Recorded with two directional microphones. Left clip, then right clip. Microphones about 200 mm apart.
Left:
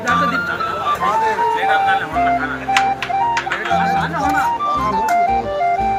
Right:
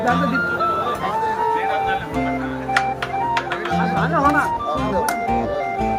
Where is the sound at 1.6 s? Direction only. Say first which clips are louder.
Left 5 dB; 10° right (ahead or behind).